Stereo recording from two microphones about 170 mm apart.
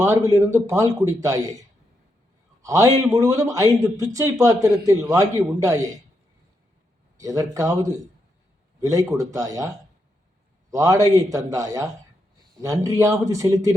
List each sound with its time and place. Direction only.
0.0 s a man's voice: 20° right (ahead or behind)
7.2 s a man's voice: 20° right (ahead or behind)